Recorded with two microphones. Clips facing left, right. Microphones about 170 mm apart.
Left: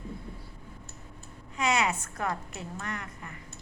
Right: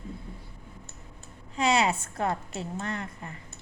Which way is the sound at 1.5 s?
30° right (ahead or behind).